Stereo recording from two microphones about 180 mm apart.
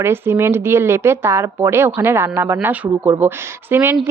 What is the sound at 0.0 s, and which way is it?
A woman's voice, 15° right (ahead or behind).